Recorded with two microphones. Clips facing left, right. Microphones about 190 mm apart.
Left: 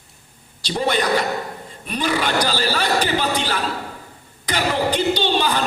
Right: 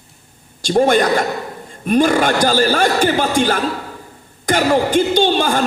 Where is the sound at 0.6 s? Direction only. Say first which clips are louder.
Right 7 dB; 50° right (ahead or behind).